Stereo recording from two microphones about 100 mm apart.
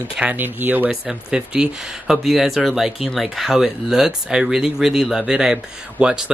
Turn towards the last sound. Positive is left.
turn(degrees=-10)  # may be behind; listen again after turning